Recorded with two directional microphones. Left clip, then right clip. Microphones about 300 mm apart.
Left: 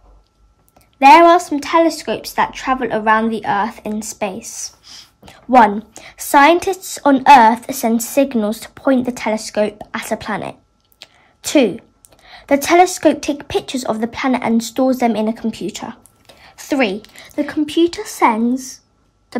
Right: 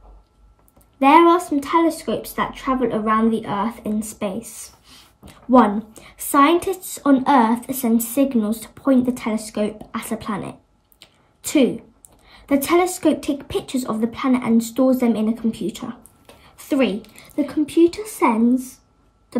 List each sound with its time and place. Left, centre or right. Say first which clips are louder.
1.0 s a woman's voice: left 6 dB; centre
16.3 s a sound: left 3 dB; centre
17.4 s speech: left 1 dB; centre